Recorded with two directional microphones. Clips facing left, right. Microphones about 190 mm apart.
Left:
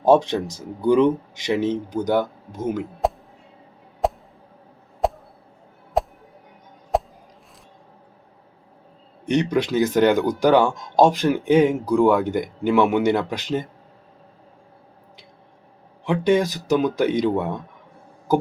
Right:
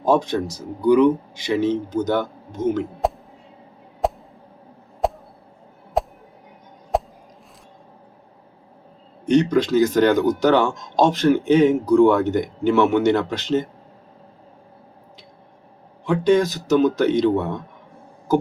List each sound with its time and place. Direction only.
0.1 s speech: 20° left (ahead or behind)
3.0 s music: centre (ahead or behind)
4.0 s a sound: centre (ahead or behind)
6.0 s music: centre (ahead or behind)
6.9 s chop: centre (ahead or behind)
9.4 s speech: 15° left (ahead or behind)
16.0 s speech: 15° left (ahead or behind)